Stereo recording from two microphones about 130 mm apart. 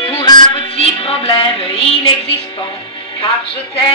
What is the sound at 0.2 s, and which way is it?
Music, 35° left (ahead or behind).